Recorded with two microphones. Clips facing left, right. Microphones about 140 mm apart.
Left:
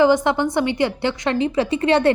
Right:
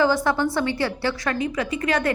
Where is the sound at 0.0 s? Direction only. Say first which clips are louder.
Left 4 dB; 20° left (ahead or behind).